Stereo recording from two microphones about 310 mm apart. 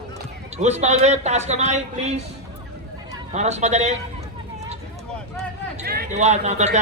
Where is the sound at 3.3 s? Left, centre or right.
Right.